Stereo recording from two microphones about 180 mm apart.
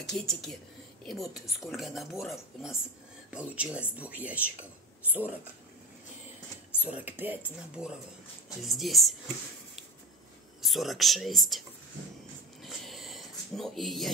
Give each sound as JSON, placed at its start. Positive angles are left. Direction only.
{"t": 0.1, "sound": "speech", "side_deg": 0}
{"t": 6.8, "sound": "speech", "side_deg": -10}
{"t": 10.6, "sound": "speech", "side_deg": 0}
{"t": 12.6, "sound": "a sound", "side_deg": 0}